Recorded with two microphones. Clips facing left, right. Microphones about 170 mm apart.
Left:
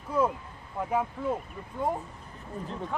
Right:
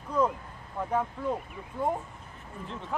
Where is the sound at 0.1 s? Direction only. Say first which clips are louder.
Even; 10° left (ahead or behind).